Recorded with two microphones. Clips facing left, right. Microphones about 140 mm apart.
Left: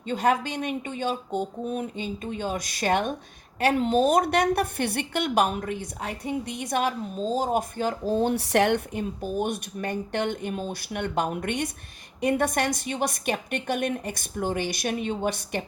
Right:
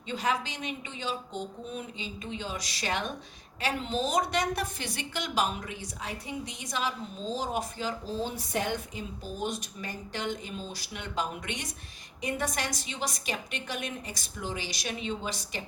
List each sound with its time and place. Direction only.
0.0 s a woman's voice: 50° left (ahead or behind)